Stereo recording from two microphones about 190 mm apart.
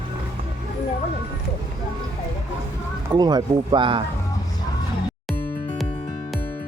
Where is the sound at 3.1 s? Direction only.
20° right (ahead or behind).